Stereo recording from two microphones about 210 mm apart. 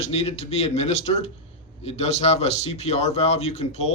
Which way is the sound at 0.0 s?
30° left (ahead or behind).